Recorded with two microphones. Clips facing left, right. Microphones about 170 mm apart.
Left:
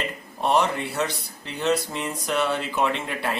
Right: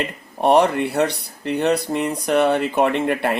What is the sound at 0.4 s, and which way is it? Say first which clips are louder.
Speech: right 7 dB; 60° right (ahead or behind).